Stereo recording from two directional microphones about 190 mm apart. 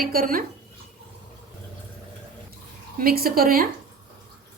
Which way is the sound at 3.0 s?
50° right (ahead or behind).